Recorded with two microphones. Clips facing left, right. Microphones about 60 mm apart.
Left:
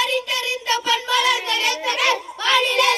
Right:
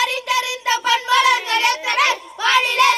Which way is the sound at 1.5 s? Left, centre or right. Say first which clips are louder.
Right 4 dB; right.